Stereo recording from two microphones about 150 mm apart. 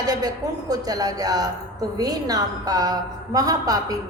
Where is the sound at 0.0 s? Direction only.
25° right (ahead or behind).